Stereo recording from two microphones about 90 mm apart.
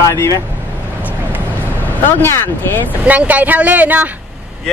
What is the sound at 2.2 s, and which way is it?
Speech, 25° left (ahead or behind).